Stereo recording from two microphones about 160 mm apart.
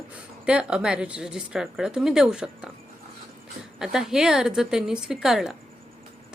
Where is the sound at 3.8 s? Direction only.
5° right (ahead or behind).